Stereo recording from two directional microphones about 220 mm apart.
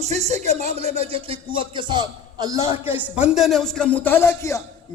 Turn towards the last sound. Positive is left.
turn(degrees=15)  # may be behind; listen again after turning